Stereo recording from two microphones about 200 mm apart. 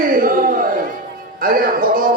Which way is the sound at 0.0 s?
45° right (ahead or behind).